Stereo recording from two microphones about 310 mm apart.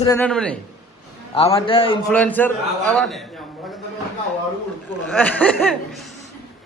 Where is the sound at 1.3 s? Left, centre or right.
Centre.